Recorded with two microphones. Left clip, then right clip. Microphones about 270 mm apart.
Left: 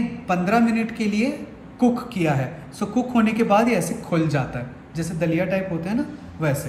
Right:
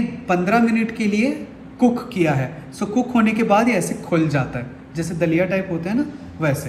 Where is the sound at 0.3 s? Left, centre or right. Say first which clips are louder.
Right 3 dB; centre.